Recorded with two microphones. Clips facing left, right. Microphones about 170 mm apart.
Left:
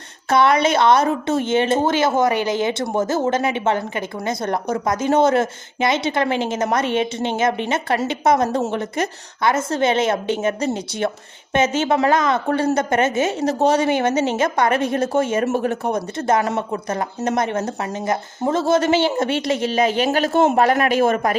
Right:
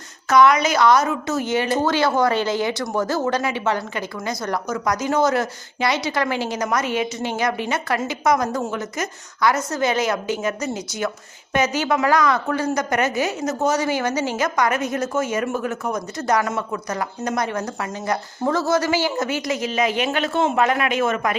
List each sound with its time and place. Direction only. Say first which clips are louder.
0.3 s a woman's voice: even; 30° left (ahead or behind)